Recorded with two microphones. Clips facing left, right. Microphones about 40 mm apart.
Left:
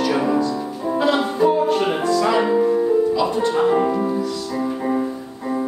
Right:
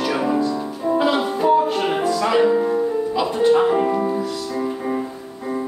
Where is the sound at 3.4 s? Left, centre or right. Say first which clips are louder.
Right 5 dB; centre.